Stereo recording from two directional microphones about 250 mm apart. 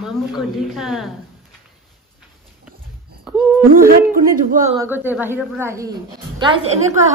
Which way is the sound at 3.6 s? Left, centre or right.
Right.